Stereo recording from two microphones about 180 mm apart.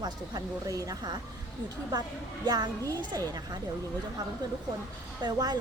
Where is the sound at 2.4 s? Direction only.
20° right (ahead or behind).